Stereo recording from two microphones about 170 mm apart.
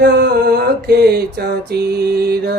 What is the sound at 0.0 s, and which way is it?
Mantra, 70° right (ahead or behind).